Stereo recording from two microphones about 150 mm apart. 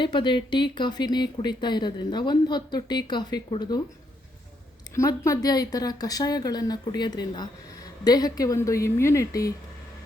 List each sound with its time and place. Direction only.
0.0 s speech: 30° left (ahead or behind)
4.9 s speech: 20° left (ahead or behind)